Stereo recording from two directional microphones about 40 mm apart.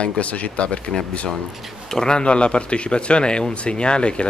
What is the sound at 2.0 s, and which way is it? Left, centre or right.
Speech, centre.